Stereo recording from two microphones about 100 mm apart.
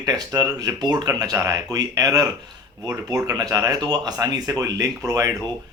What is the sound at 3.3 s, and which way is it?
Speech, 35° right (ahead or behind).